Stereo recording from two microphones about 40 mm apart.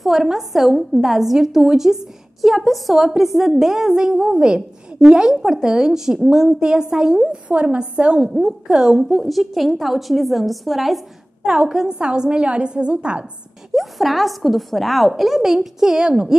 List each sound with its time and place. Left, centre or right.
0.0 s a woman's voice: centre
7.4 s a woman's voice: right
8.9 s a woman's voice: centre
11.4 s a woman's voice: centre
13.7 s a woman's voice: centre